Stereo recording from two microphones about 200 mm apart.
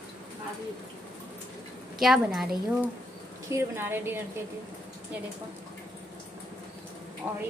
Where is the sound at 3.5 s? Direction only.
10° right (ahead or behind).